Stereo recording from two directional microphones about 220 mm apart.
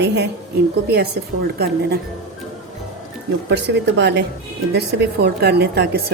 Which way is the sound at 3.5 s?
50° right (ahead or behind).